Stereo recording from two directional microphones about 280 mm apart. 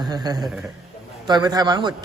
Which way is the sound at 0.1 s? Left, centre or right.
Centre.